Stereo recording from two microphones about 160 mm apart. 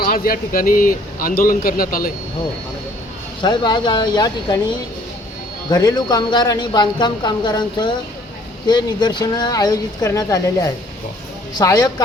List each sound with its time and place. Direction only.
0.0 s speech: 65° left (ahead or behind)
3.4 s speech: 25° left (ahead or behind)